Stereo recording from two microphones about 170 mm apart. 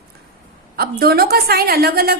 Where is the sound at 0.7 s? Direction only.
65° right (ahead or behind).